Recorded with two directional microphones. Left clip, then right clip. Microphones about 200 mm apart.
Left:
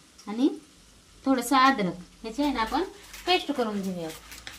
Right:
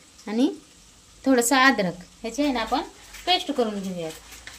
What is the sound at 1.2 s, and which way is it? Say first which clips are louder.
Speech: right 3 dB; 40° right (ahead or behind).